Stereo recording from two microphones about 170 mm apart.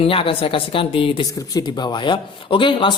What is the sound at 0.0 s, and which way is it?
A woman's voice, 35° left (ahead or behind).